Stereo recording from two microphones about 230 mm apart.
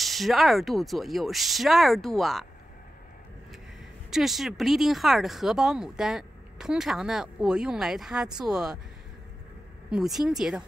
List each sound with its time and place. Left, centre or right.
0.0 s speech: centre
4.1 s speech: centre
9.8 s speech: centre